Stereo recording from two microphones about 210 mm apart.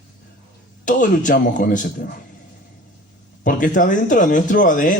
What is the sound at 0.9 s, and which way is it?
Speech, 40° left (ahead or behind).